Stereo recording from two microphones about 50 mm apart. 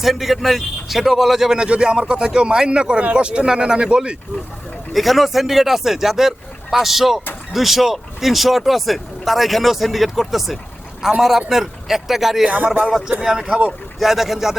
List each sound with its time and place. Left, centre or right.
0.0 s speech: centre
1.6 s speech: right
4.9 s speech: centre
12.5 s speech: right
13.1 s speech: centre